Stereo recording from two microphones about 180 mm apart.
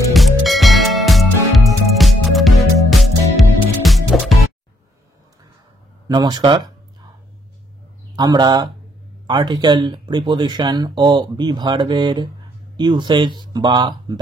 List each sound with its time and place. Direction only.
0.1 s music: centre (ahead or behind)
6.0 s speech: 25° right (ahead or behind)
8.2 s speech: 25° right (ahead or behind)